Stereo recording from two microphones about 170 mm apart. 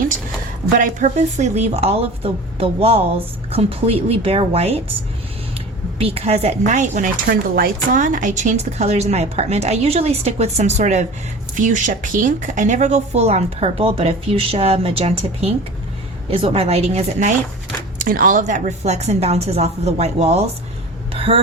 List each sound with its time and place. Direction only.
0.8 s speech: 45° right (ahead or behind)
6.0 s speech: 35° right (ahead or behind); by 7.7 s 60° right (ahead or behind)
7.9 s speech: 50° right (ahead or behind)
21.1 s a sound: 35° right (ahead or behind)